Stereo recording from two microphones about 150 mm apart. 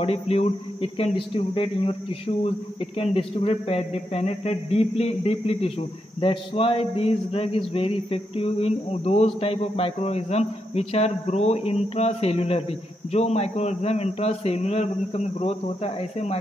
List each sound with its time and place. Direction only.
0.0 s speech: 40° left (ahead or behind)